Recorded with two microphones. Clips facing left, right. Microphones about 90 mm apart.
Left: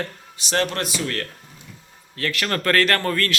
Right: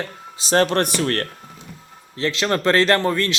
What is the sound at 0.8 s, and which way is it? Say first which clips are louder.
Speech: right 6 dB; 55° right (ahead or behind).